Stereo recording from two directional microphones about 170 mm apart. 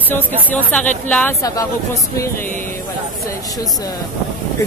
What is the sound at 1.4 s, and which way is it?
Speech, 20° left (ahead or behind).